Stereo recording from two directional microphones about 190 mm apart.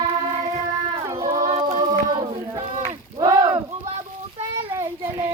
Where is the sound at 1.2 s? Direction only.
15° right (ahead or behind).